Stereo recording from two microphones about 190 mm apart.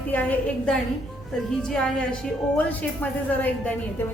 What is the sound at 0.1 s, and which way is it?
A woman's voice, 10° left (ahead or behind).